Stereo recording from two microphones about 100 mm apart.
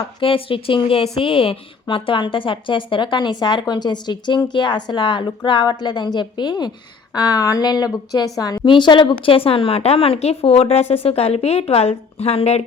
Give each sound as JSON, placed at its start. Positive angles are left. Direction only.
{"t": 0.0, "sound": "a woman's voice", "side_deg": 65}
{"t": 8.6, "sound": "speech", "side_deg": 55}